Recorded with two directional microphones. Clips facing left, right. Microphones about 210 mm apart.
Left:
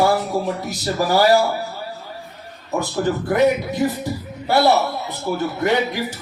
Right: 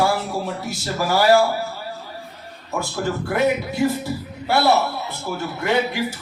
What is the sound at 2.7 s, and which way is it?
Speech, 15° left (ahead or behind).